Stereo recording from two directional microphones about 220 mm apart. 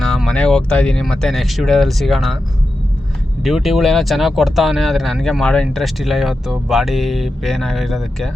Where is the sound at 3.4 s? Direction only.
Centre (ahead or behind).